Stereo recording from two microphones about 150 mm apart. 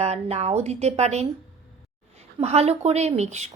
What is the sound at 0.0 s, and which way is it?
A woman's voice, 45° right (ahead or behind).